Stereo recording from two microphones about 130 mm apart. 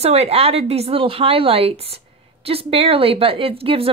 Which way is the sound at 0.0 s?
50° right (ahead or behind).